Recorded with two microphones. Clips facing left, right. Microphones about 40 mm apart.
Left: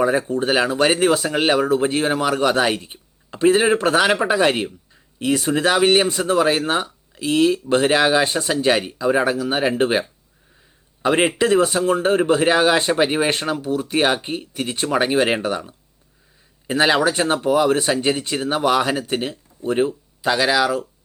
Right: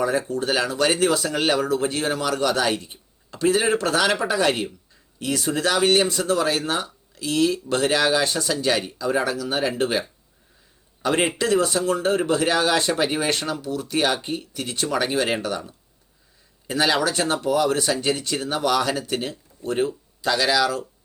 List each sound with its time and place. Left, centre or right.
0.0 s speech: left